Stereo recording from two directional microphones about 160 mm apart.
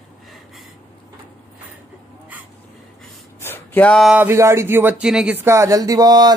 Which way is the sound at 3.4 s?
10° left (ahead or behind).